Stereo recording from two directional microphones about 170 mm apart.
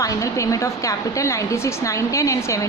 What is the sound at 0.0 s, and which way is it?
A woman's voice, 20° left (ahead or behind).